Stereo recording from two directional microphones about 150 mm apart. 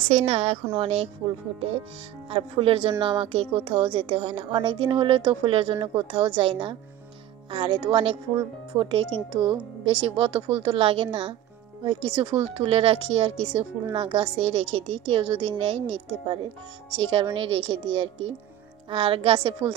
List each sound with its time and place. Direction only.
0.0 s speech: 40° right (ahead or behind)
2.2 s speech: 40° right (ahead or behind)